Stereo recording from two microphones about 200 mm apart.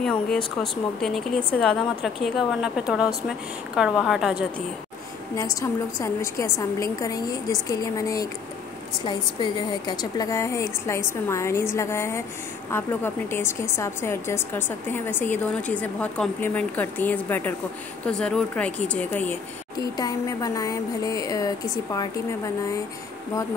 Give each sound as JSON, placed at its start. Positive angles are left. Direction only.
{"t": 0.0, "sound": "speech", "side_deg": 5}
{"t": 5.3, "sound": "a woman's voice", "side_deg": 15}
{"t": 19.8, "sound": "a woman's voice", "side_deg": 20}